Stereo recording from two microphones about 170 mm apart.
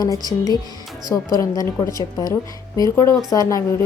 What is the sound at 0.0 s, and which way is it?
Speech, 25° left (ahead or behind).